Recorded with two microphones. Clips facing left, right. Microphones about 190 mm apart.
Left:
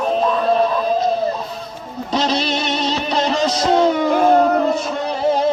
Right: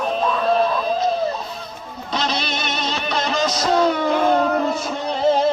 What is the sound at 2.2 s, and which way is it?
Music, 35° left (ahead or behind).